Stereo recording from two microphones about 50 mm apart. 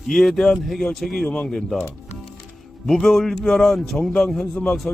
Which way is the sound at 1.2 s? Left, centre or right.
Left.